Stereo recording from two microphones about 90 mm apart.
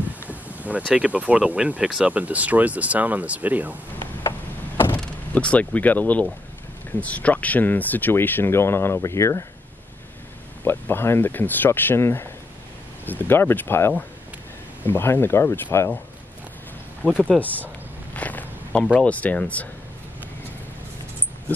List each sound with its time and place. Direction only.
0.3 s a sound: 15° right (ahead or behind)
0.9 s speech: 10° right (ahead or behind)
4.7 s speech: 25° left (ahead or behind)
10.6 s speech: 25° left (ahead or behind)
17.2 s speech: 15° left (ahead or behind)